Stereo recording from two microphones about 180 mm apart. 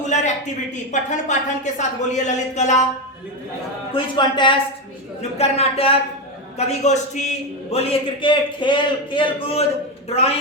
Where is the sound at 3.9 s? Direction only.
25° left (ahead or behind).